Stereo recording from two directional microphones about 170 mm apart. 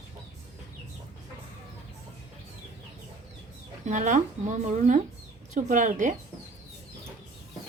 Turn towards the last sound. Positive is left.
turn(degrees=-45)  # may be behind; listen again after turning